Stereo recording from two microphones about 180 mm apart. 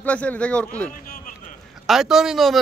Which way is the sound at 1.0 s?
50° left (ahead or behind).